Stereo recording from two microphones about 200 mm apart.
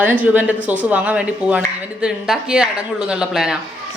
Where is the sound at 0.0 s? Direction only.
10° right (ahead or behind).